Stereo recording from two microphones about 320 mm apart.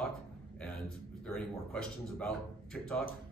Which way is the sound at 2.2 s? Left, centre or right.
Centre.